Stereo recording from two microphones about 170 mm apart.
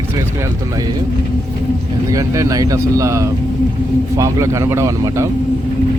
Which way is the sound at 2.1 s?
20° right (ahead or behind).